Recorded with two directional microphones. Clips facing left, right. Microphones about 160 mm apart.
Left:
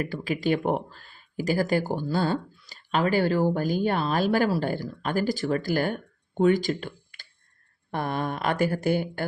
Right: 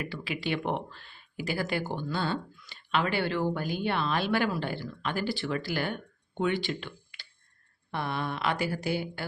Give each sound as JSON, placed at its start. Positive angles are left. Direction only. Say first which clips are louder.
{"t": 0.0, "sound": "speech", "louder": "left 7 dB", "side_deg": 45}